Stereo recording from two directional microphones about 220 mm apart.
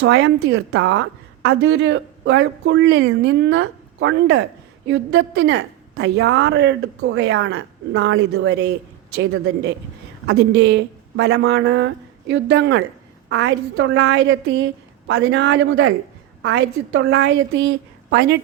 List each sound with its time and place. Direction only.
0.0 s a woman's voice: 50° right (ahead or behind)
10.3 s a woman's voice: 50° right (ahead or behind)